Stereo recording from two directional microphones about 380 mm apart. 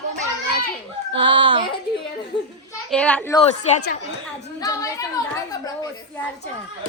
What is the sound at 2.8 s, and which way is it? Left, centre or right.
Speech, centre.